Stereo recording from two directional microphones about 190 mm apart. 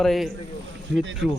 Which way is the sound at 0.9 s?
65° right (ahead or behind).